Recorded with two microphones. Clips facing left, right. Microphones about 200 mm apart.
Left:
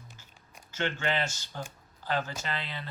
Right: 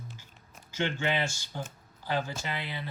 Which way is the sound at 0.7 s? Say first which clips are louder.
Right 1 dB; 15° right (ahead or behind).